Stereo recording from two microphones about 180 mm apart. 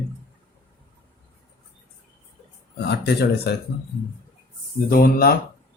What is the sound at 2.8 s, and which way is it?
Speech, 65° left (ahead or behind).